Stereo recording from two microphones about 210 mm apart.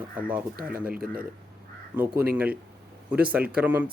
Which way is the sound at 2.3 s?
5° right (ahead or behind).